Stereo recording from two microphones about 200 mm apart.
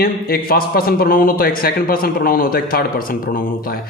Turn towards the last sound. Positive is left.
turn(degrees=45)  # may be behind; listen again after turning